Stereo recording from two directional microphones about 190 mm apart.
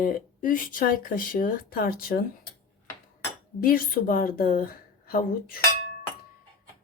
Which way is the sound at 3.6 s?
50° left (ahead or behind).